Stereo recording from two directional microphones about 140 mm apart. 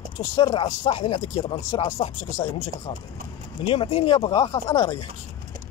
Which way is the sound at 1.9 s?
50° left (ahead or behind).